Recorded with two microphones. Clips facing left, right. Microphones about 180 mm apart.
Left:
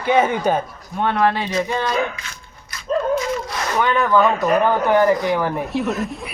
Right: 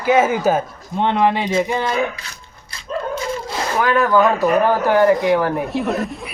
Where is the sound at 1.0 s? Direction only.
20° right (ahead or behind).